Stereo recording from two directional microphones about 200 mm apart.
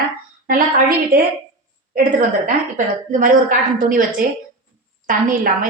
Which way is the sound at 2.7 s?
45° right (ahead or behind).